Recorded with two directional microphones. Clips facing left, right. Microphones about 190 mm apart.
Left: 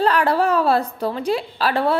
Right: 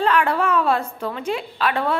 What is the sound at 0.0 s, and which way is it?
A woman's voice, 35° left (ahead or behind).